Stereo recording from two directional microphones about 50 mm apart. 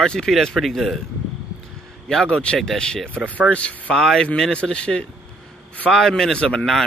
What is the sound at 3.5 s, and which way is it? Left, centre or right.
Speech, left.